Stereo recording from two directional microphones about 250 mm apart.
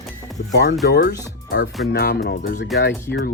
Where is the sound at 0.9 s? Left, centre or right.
Left.